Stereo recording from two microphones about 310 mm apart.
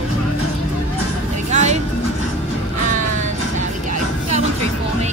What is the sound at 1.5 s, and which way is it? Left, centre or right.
Vehicle, right.